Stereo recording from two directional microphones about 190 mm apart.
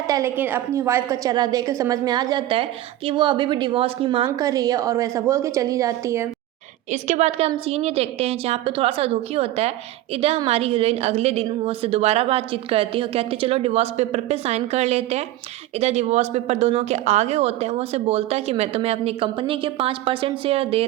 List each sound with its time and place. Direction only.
0.1 s a woman's voice: 15° right (ahead or behind)
4.3 s a woman's voice: 20° right (ahead or behind)
6.9 s a woman's voice: 35° right (ahead or behind)